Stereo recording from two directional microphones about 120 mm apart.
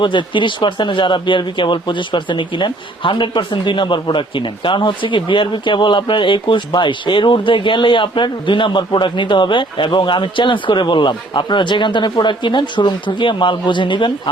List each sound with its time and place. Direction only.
0.0 s speech: 40° left (ahead or behind)